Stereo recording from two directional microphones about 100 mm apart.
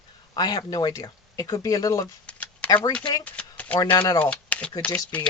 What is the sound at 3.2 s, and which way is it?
Typewriter, 15° left (ahead or behind).